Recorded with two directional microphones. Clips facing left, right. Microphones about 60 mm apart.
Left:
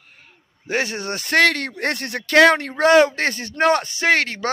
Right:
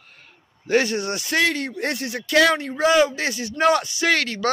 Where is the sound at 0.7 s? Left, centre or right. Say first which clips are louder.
Right 3 dB; left.